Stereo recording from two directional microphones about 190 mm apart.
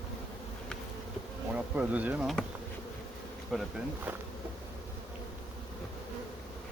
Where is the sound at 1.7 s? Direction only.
10° right (ahead or behind).